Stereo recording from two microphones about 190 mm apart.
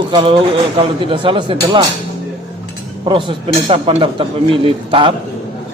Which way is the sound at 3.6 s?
30° right (ahead or behind).